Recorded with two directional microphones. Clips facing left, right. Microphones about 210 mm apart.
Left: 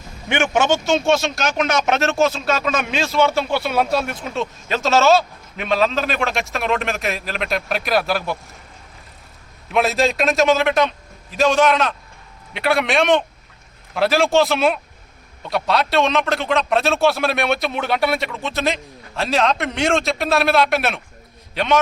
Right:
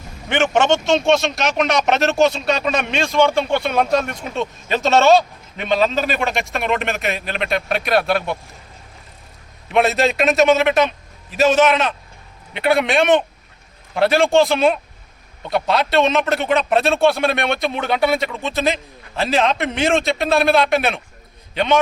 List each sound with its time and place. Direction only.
0.3 s a man's voice: 10° left (ahead or behind)
9.7 s a man's voice: centre (ahead or behind)